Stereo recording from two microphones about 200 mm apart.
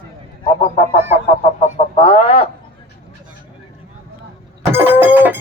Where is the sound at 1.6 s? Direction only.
30° left (ahead or behind).